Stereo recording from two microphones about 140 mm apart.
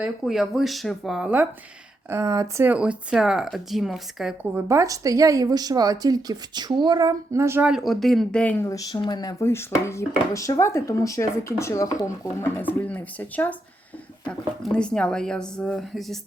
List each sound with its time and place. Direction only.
0.0 s speech: centre (ahead or behind)
2.0 s a woman's voice: 20° right (ahead or behind)
2.6 s speech: 10° right (ahead or behind)
4.5 s a woman's voice: 20° right (ahead or behind)
7.7 s speech: centre (ahead or behind)
8.7 s speech: 25° left (ahead or behind); by 16.1 s 5° left (ahead or behind)